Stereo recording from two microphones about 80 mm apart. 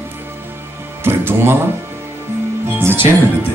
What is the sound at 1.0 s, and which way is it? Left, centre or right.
Music, right.